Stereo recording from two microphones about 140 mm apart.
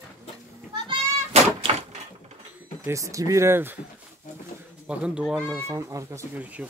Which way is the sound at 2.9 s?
20° right (ahead or behind).